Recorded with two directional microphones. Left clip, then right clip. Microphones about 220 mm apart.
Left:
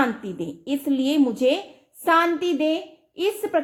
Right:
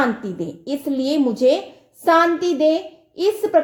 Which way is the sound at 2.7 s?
20° left (ahead or behind).